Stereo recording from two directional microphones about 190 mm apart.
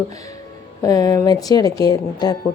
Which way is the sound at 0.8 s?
20° left (ahead or behind).